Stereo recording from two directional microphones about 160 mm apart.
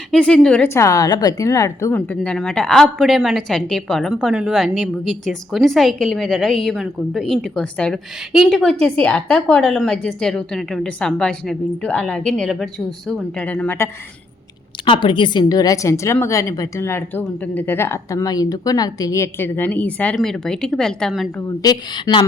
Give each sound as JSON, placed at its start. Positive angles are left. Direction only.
{"t": 0.1, "sound": "a woman's voice", "side_deg": 5}
{"t": 14.8, "sound": "a woman's voice", "side_deg": 30}
{"t": 21.6, "sound": "a woman's voice", "side_deg": 25}